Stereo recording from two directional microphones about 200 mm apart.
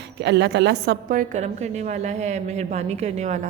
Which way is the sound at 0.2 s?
60° right (ahead or behind).